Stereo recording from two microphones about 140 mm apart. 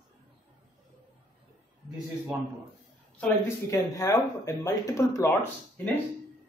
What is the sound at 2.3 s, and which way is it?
Speech, 5° right (ahead or behind).